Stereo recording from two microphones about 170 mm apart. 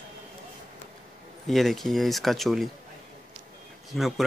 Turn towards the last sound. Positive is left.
turn(degrees=0)  # may be behind; listen again after turning